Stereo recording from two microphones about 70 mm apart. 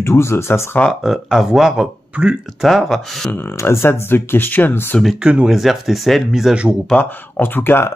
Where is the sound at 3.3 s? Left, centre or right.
Left.